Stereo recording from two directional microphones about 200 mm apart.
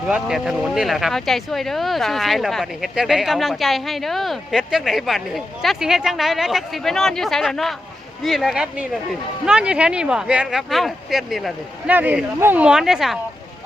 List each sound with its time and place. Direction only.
0.1 s speech: centre (ahead or behind)